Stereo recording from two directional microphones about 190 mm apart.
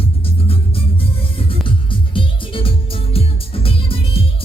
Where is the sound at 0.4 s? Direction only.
30° left (ahead or behind).